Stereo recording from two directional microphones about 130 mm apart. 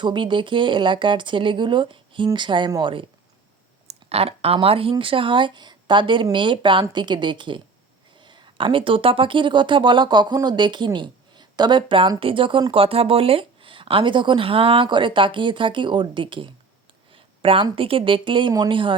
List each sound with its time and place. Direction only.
0.0 s speech: 35° right (ahead or behind)
3.8 s speech: 50° right (ahead or behind)